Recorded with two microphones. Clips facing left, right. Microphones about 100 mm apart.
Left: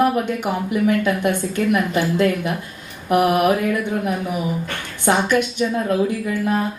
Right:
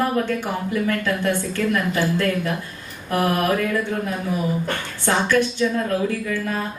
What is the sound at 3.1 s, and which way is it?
Speech, 15° left (ahead or behind).